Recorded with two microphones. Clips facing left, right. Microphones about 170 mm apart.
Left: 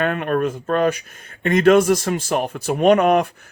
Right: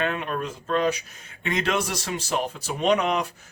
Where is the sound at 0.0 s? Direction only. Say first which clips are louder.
Left 7 dB; 55° left (ahead or behind).